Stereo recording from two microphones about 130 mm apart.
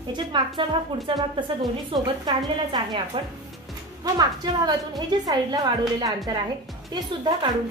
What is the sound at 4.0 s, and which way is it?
A woman's voice, 30° right (ahead or behind).